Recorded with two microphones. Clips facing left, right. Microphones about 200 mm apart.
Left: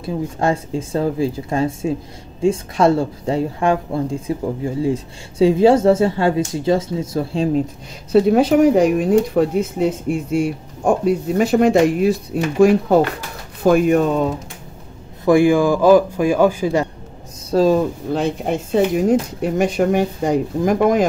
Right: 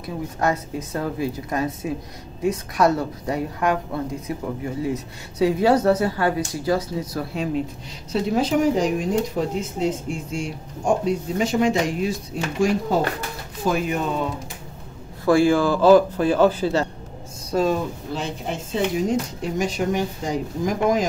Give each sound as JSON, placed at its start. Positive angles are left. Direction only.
{"t": 0.0, "sound": "a woman's voice", "side_deg": 30}
{"t": 8.1, "sound": "speech", "side_deg": 60}
{"t": 15.2, "sound": "a man's voice", "side_deg": 15}
{"t": 17.5, "sound": "speech", "side_deg": 35}
{"t": 18.1, "sound": "speech", "side_deg": 55}